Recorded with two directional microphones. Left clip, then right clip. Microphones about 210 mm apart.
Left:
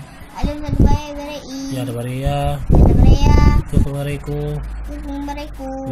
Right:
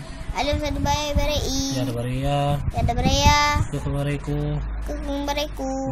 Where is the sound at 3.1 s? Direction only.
50° right (ahead or behind).